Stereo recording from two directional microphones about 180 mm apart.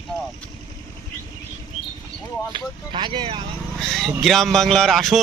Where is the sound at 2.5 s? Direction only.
25° right (ahead or behind).